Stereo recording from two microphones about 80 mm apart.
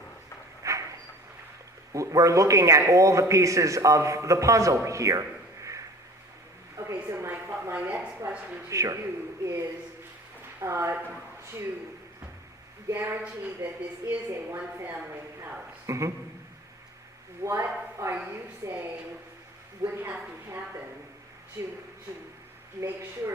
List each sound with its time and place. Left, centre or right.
0.6 s a sound: right
1.9 s a man's voice: right
6.7 s a woman's voice: right
8.7 s a man's voice: right
12.9 s a man's voice: right
17.4 s a man's voice: right
19.8 s a woman's voice: right
21.6 s a man's voice: right
22.8 s a man's voice: right